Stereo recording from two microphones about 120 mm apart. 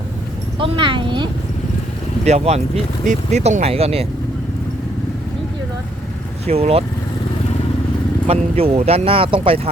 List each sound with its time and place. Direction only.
0.6 s speech: 45° right (ahead or behind)
2.2 s speech: 65° right (ahead or behind)
6.4 s speech: 55° right (ahead or behind)
8.3 s speech: 55° right (ahead or behind)